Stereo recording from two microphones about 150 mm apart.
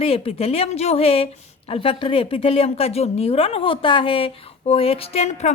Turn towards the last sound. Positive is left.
turn(degrees=45)  # may be behind; listen again after turning